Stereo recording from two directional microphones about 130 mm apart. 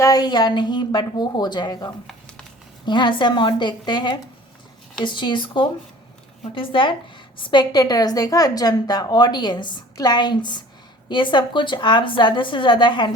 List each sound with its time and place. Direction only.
0.0 s a woman's voice: 30° left (ahead or behind)